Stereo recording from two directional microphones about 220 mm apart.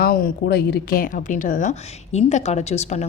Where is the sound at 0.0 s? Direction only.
40° left (ahead or behind).